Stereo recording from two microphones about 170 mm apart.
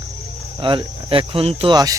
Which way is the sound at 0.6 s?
30° right (ahead or behind).